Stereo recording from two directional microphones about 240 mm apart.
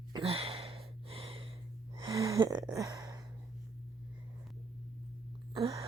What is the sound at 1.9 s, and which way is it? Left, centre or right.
Gasp, centre.